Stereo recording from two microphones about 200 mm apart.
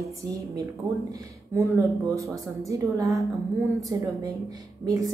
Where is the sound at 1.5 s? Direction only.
15° right (ahead or behind).